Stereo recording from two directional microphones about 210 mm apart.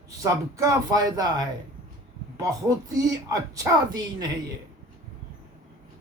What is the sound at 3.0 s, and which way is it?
Speech, 15° right (ahead or behind).